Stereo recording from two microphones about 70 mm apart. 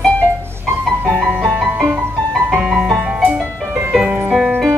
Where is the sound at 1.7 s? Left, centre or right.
Right.